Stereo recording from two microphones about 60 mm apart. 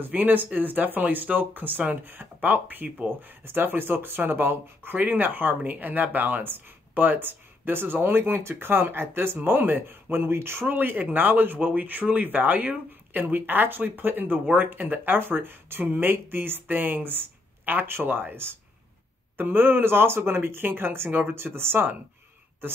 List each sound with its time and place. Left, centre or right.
0.0 s speech: right